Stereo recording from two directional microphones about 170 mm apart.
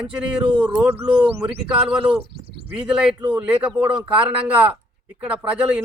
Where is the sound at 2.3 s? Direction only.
70° right (ahead or behind).